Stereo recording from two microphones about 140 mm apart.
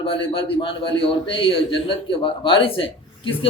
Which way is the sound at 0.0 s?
40° left (ahead or behind).